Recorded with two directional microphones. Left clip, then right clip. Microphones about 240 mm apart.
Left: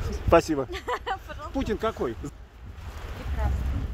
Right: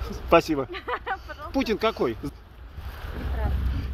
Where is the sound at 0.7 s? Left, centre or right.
Centre.